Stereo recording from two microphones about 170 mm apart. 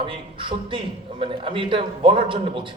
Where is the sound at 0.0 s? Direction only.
30° right (ahead or behind).